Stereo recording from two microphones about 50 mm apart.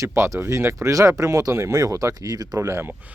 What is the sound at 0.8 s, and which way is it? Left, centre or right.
Speech, right.